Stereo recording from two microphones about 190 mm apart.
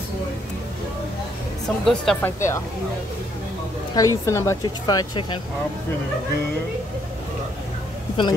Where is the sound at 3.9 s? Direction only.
15° left (ahead or behind).